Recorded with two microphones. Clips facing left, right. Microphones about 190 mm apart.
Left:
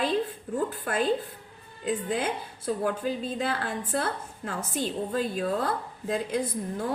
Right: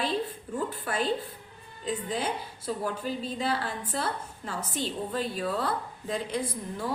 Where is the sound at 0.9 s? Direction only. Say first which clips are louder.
Left 2 dB; 50° left (ahead or behind).